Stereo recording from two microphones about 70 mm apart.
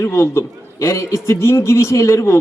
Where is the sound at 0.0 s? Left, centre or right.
Left.